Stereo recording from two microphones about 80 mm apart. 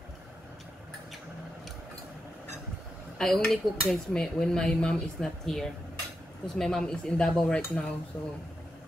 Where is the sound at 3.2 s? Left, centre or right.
Centre.